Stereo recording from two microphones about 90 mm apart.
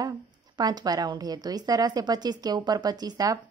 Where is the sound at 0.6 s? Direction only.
50° right (ahead or behind).